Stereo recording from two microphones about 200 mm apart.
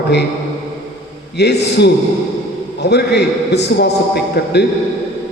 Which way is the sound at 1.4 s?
55° left (ahead or behind).